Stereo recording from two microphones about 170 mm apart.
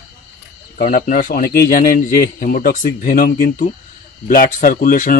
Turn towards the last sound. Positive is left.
turn(degrees=50)  # may be behind; listen again after turning